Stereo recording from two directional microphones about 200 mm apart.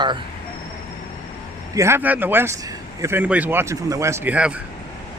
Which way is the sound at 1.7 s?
15° right (ahead or behind).